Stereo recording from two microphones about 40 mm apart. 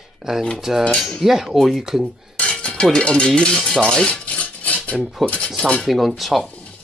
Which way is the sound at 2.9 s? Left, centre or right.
Left.